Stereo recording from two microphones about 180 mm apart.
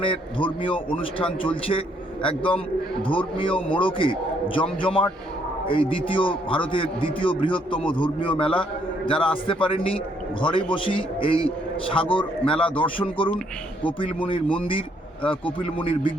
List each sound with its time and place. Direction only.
0.0 s speech: 30° left (ahead or behind)